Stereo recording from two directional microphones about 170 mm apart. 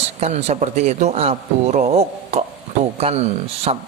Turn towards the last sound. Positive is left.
turn(degrees=-35)  # may be behind; listen again after turning